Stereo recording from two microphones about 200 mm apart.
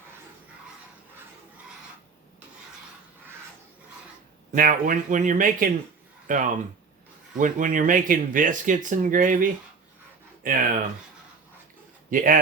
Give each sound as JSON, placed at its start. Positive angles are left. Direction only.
{"t": 4.5, "sound": "speech", "side_deg": -40}
{"t": 12.1, "sound": "speech", "side_deg": -40}